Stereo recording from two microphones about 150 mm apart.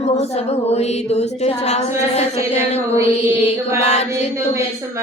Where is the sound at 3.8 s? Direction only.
45° left (ahead or behind).